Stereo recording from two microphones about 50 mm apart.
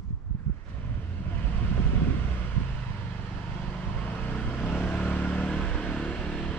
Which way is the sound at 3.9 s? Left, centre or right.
Left.